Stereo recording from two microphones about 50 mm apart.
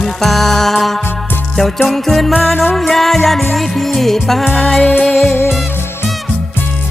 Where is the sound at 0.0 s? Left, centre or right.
Centre.